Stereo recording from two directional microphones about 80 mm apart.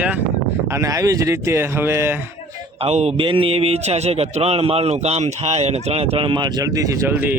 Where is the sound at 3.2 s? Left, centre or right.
Right.